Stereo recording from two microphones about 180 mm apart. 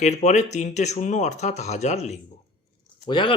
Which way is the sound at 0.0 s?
40° left (ahead or behind).